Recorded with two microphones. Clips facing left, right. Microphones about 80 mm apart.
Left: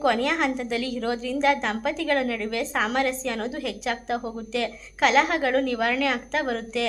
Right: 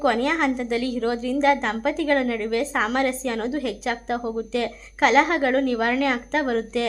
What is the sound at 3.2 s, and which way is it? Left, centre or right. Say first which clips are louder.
Speech: right 3 dB; centre.